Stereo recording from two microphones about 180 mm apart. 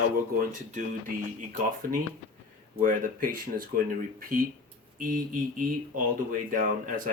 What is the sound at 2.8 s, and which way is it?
Speech, 50° right (ahead or behind).